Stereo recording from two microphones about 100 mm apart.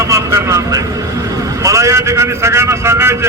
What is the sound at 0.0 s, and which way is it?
Vehicle, 30° right (ahead or behind).